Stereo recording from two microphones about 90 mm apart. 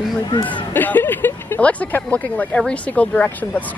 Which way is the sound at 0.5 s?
20° left (ahead or behind).